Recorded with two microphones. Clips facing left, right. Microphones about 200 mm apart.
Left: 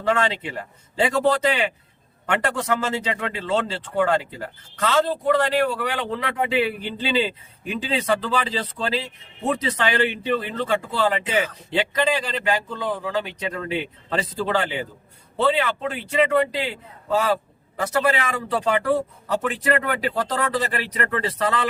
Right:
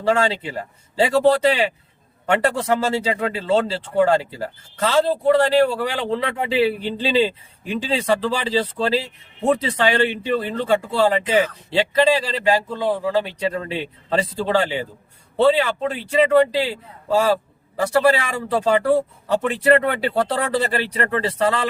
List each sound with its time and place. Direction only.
0.1 s a man's voice: 30° right (ahead or behind)